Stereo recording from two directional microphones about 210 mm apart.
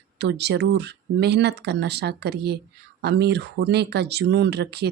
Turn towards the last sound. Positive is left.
turn(degrees=-50)  # may be behind; listen again after turning